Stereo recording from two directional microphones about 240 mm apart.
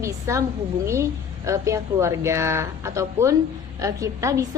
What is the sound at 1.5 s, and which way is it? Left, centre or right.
Speech, centre.